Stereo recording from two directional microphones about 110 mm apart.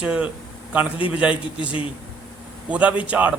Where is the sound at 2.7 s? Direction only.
10° right (ahead or behind).